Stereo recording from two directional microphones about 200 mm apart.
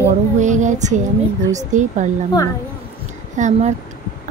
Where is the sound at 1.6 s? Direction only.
40° right (ahead or behind).